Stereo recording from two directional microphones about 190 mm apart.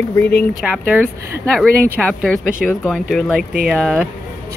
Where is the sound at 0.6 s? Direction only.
10° right (ahead or behind).